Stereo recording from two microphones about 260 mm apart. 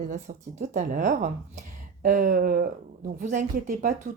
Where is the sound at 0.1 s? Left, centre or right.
Right.